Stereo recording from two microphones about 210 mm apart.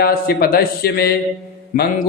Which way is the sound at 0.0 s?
45° left (ahead or behind).